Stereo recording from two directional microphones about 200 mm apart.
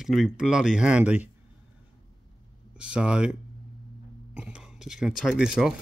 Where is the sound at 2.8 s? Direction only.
5° right (ahead or behind).